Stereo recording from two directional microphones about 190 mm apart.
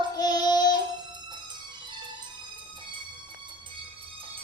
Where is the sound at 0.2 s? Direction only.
20° left (ahead or behind).